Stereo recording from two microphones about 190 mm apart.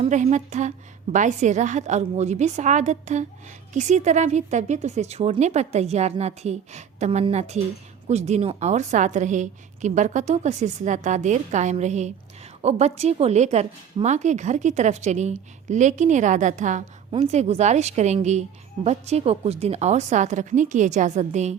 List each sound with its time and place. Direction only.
0.0 s speech: 40° right (ahead or behind)